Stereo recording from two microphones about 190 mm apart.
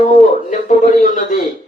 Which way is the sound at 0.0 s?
40° left (ahead or behind).